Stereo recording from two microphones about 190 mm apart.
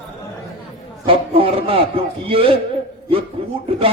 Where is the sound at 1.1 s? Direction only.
30° right (ahead or behind).